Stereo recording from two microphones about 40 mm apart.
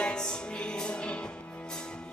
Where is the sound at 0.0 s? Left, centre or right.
Centre.